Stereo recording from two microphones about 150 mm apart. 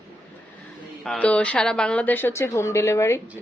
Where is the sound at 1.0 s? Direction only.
5° left (ahead or behind).